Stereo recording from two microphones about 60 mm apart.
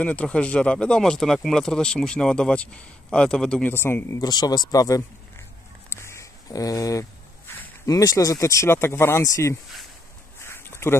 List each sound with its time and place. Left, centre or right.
0.0 s speech: centre
3.6 s speech: left
4.2 s speech: left
5.9 s a sound: left
6.5 s speech: left
7.4 s a sound: left
7.8 s speech: left
8.6 s speech: left
9.2 s speech: left
10.4 s a sound: left